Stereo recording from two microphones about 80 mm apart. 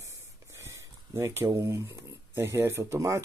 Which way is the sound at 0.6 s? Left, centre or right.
Right.